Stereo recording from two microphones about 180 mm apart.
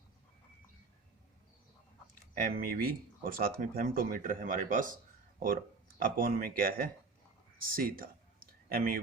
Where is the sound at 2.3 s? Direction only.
55° right (ahead or behind).